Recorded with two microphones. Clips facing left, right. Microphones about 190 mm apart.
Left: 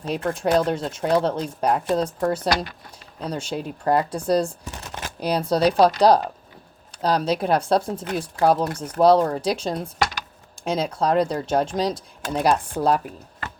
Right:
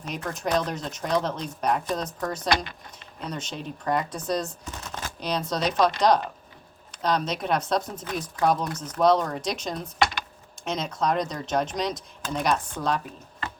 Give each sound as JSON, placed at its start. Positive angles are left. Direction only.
{"t": 0.1, "sound": "speech", "side_deg": 30}